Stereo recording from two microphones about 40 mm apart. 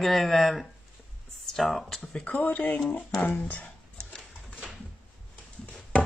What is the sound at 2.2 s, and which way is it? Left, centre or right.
Speech, left.